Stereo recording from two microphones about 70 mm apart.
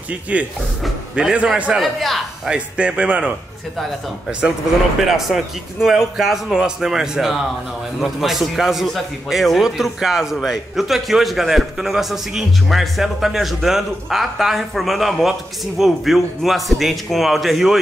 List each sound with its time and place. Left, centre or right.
0.3 s speech: right
1.8 s a man's voice: centre
2.5 s speech: centre
5.0 s a man's voice: centre